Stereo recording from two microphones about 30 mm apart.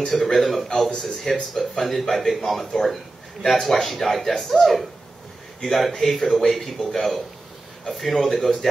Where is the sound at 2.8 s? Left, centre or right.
Centre.